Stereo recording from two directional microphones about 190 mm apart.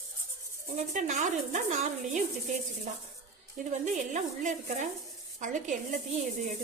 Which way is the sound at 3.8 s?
40° right (ahead or behind).